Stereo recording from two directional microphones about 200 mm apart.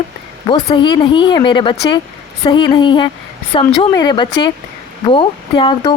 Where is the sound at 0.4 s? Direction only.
25° left (ahead or behind).